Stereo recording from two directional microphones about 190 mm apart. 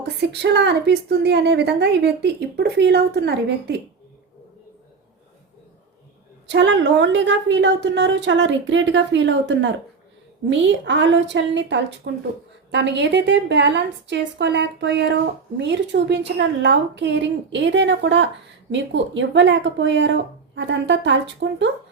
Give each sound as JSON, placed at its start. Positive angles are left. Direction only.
{"t": 0.2, "sound": "a woman's voice", "side_deg": -60}
{"t": 6.5, "sound": "a woman's voice", "side_deg": -70}